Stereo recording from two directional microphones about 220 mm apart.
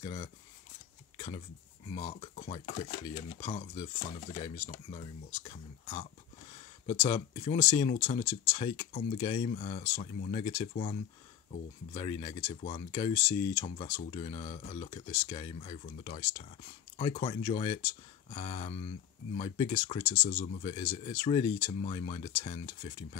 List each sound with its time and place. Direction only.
0.0 s speech: 25° left (ahead or behind)
1.1 s a sound: 25° left (ahead or behind)
1.9 s speech: 25° left (ahead or behind)